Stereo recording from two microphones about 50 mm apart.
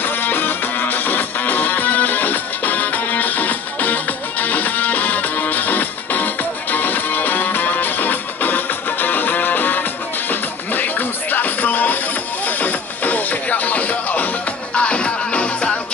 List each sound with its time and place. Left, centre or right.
0.0 s music: left